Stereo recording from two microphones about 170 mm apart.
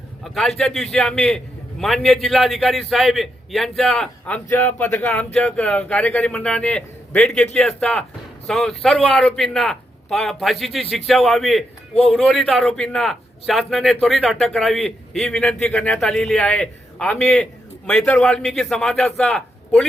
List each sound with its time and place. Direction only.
0.3 s a man's voice: centre (ahead or behind)